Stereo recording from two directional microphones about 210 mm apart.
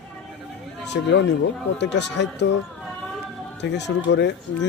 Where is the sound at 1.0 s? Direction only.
55° left (ahead or behind).